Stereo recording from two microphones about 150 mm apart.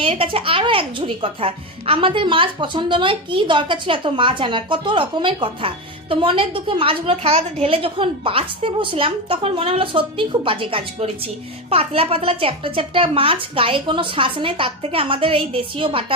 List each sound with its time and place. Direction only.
0.0 s a woman's voice: 35° right (ahead or behind)